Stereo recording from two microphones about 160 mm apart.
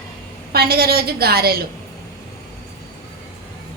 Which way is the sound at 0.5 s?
75° right (ahead or behind).